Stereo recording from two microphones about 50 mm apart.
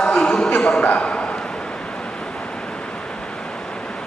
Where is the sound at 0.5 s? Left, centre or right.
Centre.